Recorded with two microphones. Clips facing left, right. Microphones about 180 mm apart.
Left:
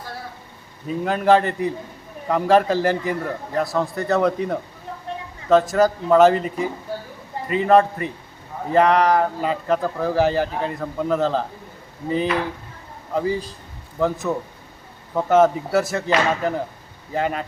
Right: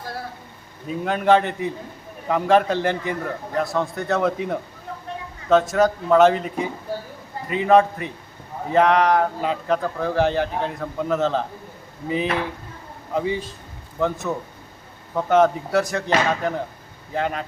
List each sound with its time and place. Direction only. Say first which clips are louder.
0.9 s speech: left 1 dB; centre (ahead or behind)